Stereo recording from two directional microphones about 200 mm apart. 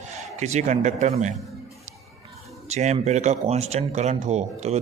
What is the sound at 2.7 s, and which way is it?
A man's voice, 35° right (ahead or behind).